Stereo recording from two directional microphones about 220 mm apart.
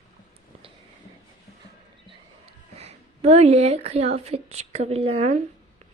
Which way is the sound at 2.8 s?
30° right (ahead or behind).